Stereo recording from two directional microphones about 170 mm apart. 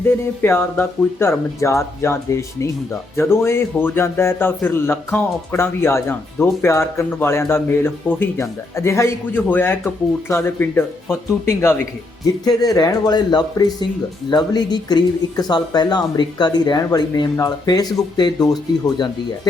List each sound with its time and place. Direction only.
0.4 s speech: 15° left (ahead or behind)